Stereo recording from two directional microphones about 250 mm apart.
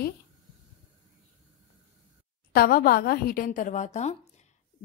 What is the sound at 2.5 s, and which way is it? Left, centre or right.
A woman's voice, left.